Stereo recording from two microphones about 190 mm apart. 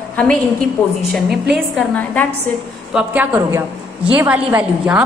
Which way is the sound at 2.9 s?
10° right (ahead or behind).